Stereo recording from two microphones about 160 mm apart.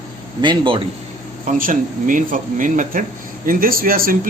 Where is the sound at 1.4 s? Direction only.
55° right (ahead or behind).